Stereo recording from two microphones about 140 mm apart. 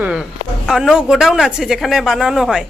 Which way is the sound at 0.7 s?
5° right (ahead or behind).